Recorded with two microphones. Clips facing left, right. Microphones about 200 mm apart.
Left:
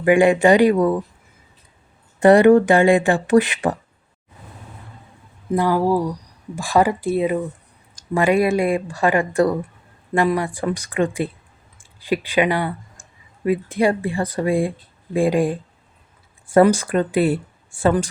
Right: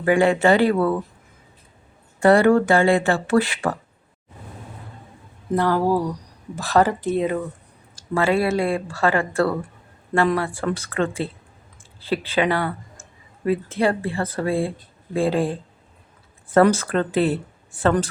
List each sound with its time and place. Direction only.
0.0 s speech: 15° left (ahead or behind)
2.2 s speech: 20° left (ahead or behind)
5.5 s speech: 10° left (ahead or behind)